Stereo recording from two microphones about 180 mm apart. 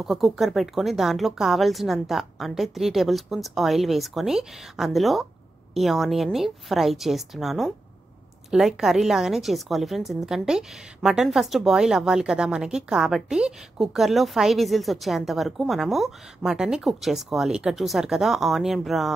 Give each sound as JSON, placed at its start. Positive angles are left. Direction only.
{"t": 0.0, "sound": "a woman's voice", "side_deg": 0}